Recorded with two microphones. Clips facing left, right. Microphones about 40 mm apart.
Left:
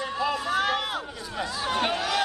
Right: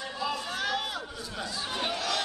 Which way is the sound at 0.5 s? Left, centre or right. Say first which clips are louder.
Left 6 dB; left.